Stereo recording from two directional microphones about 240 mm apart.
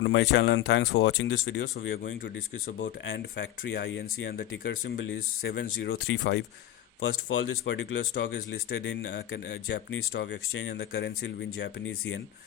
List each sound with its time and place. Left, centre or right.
0.0 s speech: left